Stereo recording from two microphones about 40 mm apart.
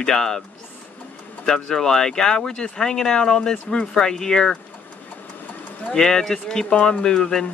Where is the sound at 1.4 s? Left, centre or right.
Centre.